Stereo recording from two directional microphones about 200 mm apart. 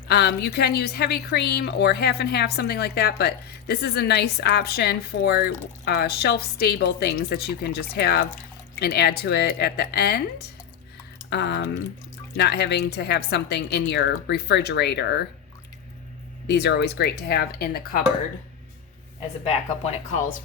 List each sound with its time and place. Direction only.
0.1 s a woman's voice: 55° left (ahead or behind)
16.5 s a woman's voice: 55° left (ahead or behind)